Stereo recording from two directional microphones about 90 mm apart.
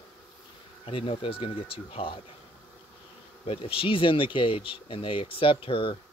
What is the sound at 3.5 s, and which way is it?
Speech, 90° left.